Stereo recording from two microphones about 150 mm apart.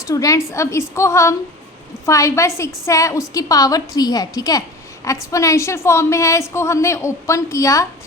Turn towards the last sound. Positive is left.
turn(degrees=20)  # may be behind; listen again after turning